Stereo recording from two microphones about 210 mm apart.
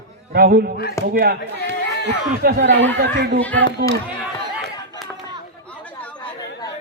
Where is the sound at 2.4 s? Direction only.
50° right (ahead or behind).